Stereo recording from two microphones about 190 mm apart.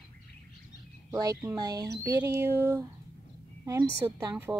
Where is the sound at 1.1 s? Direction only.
15° right (ahead or behind).